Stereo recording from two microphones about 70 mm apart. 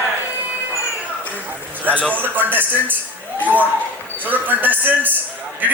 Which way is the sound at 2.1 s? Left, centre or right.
Right.